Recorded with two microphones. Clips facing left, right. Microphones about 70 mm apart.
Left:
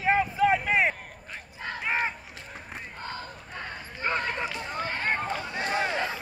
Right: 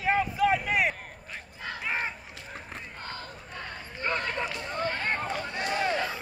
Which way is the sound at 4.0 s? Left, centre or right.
Left.